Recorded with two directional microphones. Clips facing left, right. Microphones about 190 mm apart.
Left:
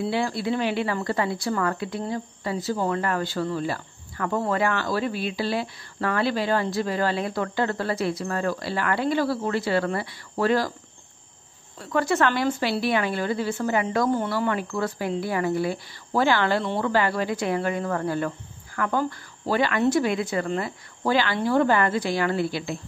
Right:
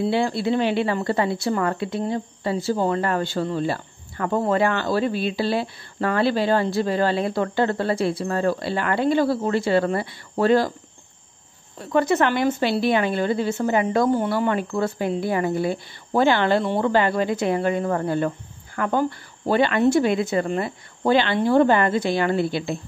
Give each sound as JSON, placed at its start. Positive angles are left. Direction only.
{"t": 0.0, "sound": "speech", "side_deg": -25}
{"t": 11.8, "sound": "speech", "side_deg": -20}